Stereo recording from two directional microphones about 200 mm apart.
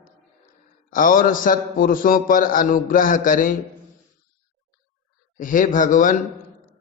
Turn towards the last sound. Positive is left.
turn(degrees=40)  # may be behind; listen again after turning